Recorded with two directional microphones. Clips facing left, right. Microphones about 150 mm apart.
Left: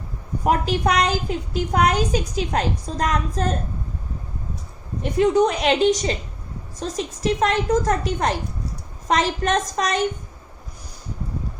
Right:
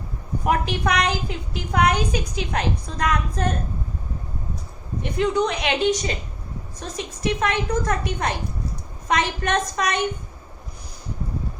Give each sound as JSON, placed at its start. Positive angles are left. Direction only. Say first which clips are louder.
{"t": 0.4, "sound": "a woman's voice", "louder": "left 2 dB", "side_deg": 35}
{"t": 5.2, "sound": "a woman's voice", "louder": "left 4 dB", "side_deg": 40}